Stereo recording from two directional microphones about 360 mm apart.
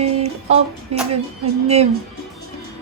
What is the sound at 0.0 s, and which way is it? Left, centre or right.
Music, centre.